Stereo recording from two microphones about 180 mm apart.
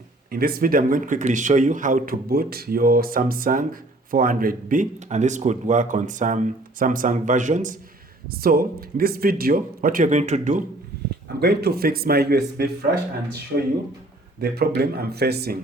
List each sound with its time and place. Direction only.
0.3 s speech: 55° right (ahead or behind)
8.3 s speech: 55° right (ahead or behind)
11.3 s speech: 65° right (ahead or behind)
14.4 s speech: 65° right (ahead or behind)